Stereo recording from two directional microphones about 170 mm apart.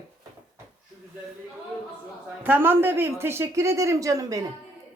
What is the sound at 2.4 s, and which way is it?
Speech, 10° right (ahead or behind).